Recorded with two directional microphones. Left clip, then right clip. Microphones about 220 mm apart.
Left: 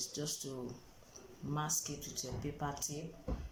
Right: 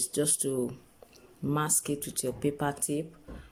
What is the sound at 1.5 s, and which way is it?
Speech, 45° right (ahead or behind).